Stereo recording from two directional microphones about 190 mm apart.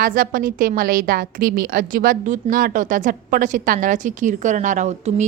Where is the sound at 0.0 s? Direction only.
45° right (ahead or behind).